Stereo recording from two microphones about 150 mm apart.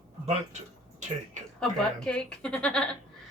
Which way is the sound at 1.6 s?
5° left (ahead or behind).